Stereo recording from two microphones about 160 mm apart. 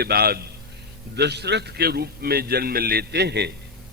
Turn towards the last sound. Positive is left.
turn(degrees=-90)